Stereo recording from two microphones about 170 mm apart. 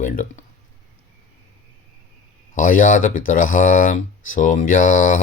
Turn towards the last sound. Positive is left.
turn(degrees=50)  # may be behind; listen again after turning